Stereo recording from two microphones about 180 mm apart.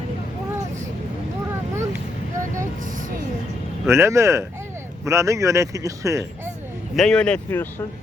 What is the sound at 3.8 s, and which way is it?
Speech, 15° right (ahead or behind).